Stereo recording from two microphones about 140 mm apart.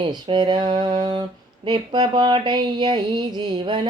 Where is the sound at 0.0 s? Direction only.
35° right (ahead or behind).